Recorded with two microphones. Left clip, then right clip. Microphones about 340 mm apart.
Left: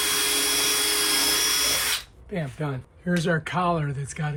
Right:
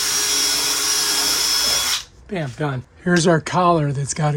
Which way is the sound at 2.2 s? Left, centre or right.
Right.